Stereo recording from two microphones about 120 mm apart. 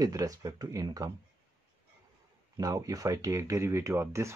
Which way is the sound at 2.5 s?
30° right (ahead or behind).